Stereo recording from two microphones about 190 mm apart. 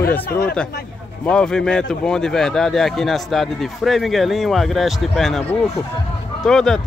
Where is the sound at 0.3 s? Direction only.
55° left (ahead or behind).